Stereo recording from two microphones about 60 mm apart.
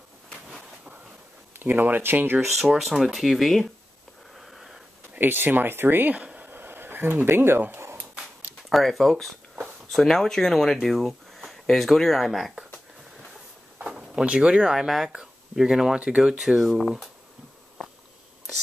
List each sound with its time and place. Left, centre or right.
1.6 s speech: right
2.5 s speech: centre
4.4 s a sound: centre
5.2 s speech: right
6.1 s a sound: right
8.6 s speech: centre
13.8 s speech: centre